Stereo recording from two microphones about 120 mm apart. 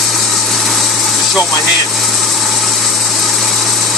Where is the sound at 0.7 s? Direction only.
Centre (ahead or behind).